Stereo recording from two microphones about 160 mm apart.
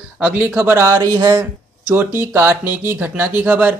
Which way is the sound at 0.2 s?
10° right (ahead or behind).